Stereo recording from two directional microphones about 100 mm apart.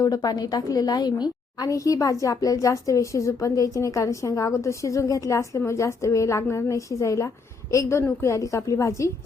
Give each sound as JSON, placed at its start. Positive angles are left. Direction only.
{"t": 0.0, "sound": "a woman's voice", "side_deg": 40}